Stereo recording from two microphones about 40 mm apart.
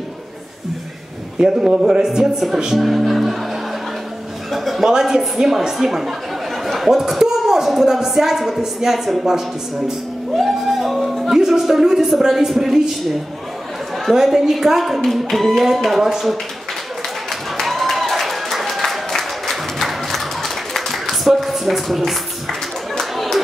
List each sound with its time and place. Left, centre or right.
1.4 s speech: centre
4.5 s a sound: centre
4.8 s speech: centre
10.4 s speech: centre
14.1 s a woman's voice: centre
17.3 s applause: centre